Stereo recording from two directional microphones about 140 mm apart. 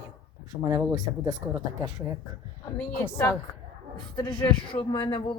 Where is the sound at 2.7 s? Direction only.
15° left (ahead or behind).